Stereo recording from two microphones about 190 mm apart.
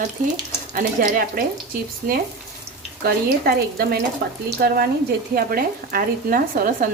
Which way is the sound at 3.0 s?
55° right (ahead or behind).